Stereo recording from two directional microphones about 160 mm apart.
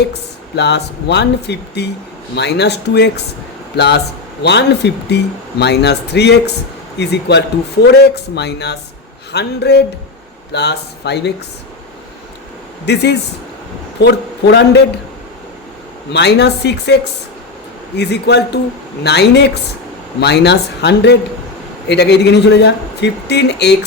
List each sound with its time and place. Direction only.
0.1 s speech: 90° left
12.8 s speech: 90° left
16.1 s speech: 90° left